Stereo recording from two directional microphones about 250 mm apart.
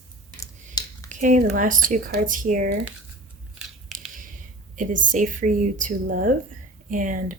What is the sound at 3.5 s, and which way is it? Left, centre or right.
Scissors, centre.